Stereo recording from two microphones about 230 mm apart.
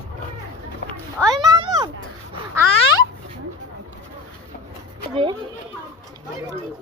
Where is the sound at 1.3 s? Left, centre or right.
Centre.